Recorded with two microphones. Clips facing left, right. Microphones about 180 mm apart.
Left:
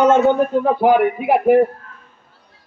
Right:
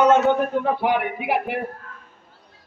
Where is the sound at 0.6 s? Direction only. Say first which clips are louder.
Left 7 dB; 45° left (ahead or behind).